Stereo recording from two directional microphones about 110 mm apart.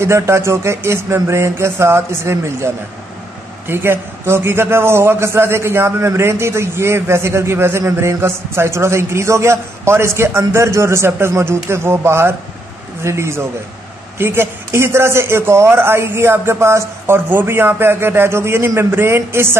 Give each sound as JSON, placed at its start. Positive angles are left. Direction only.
{"t": 0.0, "sound": "a man's voice", "side_deg": -25}